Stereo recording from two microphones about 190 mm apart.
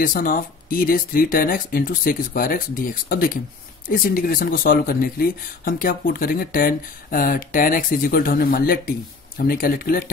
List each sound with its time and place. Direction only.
0.0 s speech: 45° left (ahead or behind)